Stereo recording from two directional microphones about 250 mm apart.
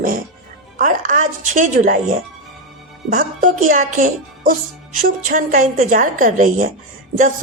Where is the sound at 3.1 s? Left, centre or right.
Right.